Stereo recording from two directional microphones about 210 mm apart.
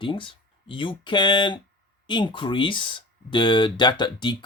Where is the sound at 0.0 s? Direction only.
25° left (ahead or behind).